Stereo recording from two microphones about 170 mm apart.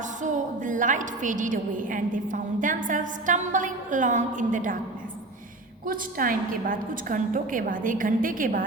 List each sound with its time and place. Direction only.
0.2 s a woman's voice: 50° right (ahead or behind)
5.8 s a woman's voice: 55° right (ahead or behind)